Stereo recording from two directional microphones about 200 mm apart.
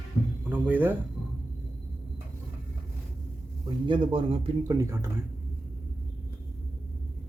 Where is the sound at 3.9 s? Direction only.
25° right (ahead or behind).